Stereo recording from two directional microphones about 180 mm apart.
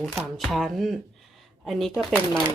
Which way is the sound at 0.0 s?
Centre (ahead or behind).